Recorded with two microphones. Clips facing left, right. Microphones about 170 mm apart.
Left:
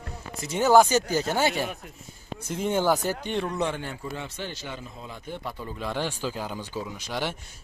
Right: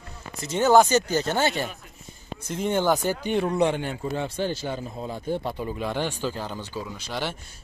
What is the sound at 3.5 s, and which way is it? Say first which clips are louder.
Speech: right 6 dB; 20° right (ahead or behind).